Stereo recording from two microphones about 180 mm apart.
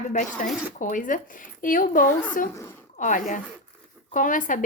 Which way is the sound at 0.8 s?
45° left (ahead or behind).